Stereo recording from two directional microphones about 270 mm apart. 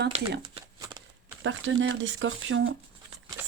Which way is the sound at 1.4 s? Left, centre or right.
Right.